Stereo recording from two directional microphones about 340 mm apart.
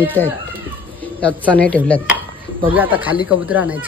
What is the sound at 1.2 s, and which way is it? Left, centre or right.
A child's voice, centre.